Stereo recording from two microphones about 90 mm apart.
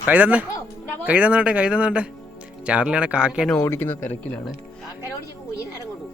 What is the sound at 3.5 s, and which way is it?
Speech, 25° left (ahead or behind).